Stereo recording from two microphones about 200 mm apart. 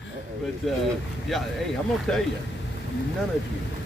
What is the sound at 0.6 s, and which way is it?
Speech, 5° left (ahead or behind).